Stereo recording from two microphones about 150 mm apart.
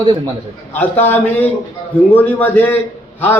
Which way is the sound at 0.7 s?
10° left (ahead or behind).